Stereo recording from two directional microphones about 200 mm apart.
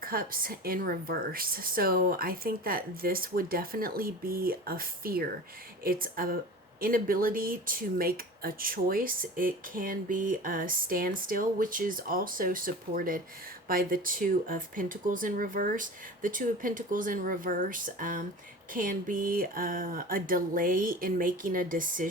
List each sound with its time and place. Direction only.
0.0 s speech: 45° right (ahead or behind)